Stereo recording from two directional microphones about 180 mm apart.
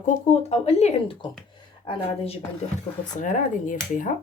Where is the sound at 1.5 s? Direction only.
30° left (ahead or behind).